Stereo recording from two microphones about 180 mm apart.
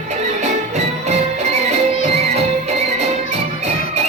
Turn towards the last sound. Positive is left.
turn(degrees=-35)  # may be behind; listen again after turning